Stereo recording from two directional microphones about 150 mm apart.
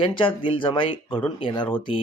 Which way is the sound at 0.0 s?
35° left (ahead or behind).